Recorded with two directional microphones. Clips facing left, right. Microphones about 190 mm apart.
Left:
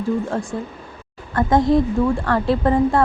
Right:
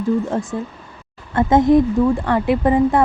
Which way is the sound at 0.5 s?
15° right (ahead or behind).